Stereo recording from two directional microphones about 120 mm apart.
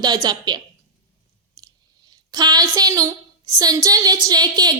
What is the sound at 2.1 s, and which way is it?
A woman's voice, 35° right (ahead or behind).